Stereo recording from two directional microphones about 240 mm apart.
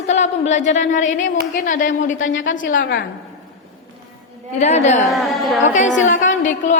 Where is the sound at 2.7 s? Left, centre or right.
Left.